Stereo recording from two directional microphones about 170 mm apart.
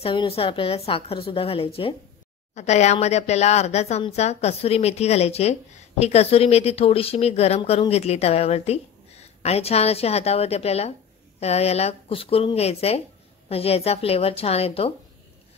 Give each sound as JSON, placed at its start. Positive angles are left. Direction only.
{"t": 0.0, "sound": "speech", "side_deg": 30}